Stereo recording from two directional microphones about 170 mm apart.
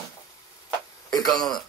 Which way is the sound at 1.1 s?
20° left (ahead or behind).